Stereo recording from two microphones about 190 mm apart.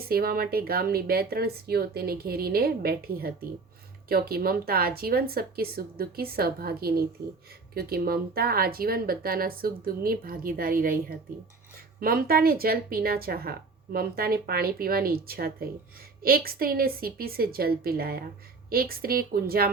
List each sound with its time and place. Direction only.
0.1 s speech: 50° right (ahead or behind)